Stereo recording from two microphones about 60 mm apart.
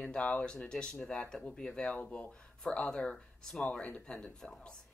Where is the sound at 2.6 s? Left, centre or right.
Centre.